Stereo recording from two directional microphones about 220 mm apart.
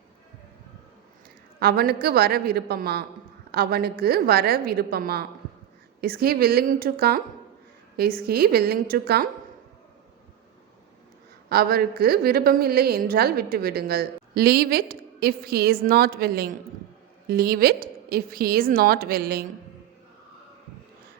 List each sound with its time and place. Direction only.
1.5 s a woman's voice: 45° right (ahead or behind)
11.4 s a woman's voice: 45° right (ahead or behind)